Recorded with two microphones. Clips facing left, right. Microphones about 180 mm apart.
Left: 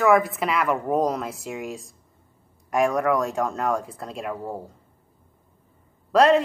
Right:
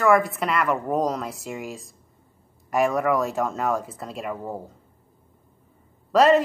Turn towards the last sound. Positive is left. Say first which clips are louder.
# even
turn(degrees=0)  # may be behind; listen again after turning